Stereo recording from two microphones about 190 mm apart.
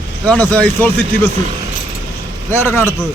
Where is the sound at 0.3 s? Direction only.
10° left (ahead or behind).